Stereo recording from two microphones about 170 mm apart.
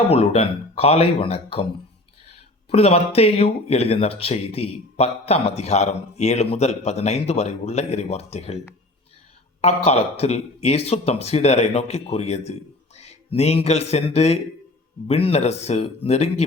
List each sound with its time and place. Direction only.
0.1 s speech: 35° left (ahead or behind)
2.6 s speech: 35° left (ahead or behind)